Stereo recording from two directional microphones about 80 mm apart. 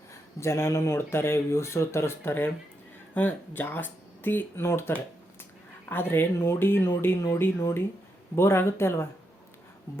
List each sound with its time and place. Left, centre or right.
0.1 s speech: left